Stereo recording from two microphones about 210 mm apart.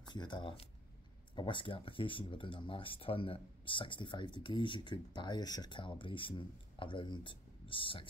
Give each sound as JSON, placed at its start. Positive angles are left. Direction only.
{"t": 0.1, "sound": "speech", "side_deg": 20}